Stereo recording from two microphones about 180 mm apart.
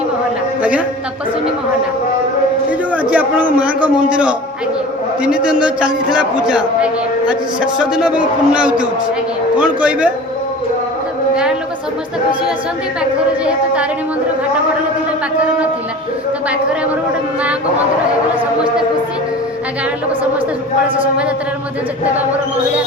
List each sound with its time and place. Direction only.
2.9 s a man's voice: 10° right (ahead or behind)
13.4 s a man's voice: 5° right (ahead or behind)